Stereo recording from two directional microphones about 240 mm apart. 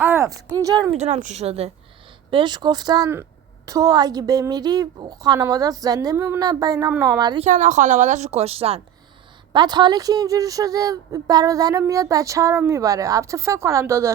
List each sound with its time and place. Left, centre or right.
0.0 s speech: centre
7.4 s speech: right; by 14.1 s centre